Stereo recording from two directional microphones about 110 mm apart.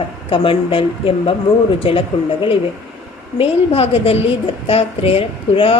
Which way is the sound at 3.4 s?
65° left (ahead or behind).